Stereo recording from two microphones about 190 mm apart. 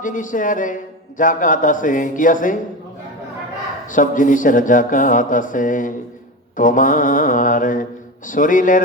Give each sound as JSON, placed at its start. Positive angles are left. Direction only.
{"t": 0.0, "sound": "a man's voice", "side_deg": 45}
{"t": 3.8, "sound": "a man's voice", "side_deg": 45}